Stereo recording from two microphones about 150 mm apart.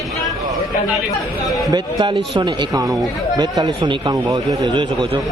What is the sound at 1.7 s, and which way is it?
Speech, 25° right (ahead or behind).